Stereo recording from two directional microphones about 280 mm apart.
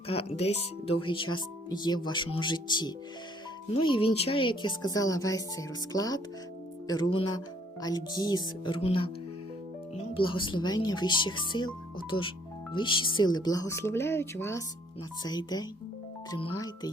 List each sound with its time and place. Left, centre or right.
0.1 s speech: left